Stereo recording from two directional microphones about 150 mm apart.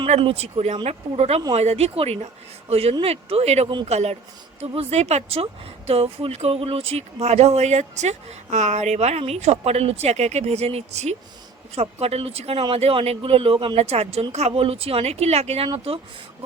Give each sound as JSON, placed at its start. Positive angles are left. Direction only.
{"t": 0.1, "sound": "speech", "side_deg": -45}